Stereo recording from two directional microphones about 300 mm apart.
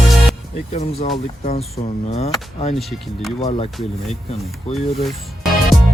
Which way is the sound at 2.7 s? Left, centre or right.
Centre.